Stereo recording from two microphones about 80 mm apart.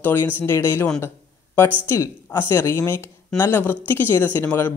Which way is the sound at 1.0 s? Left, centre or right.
Left.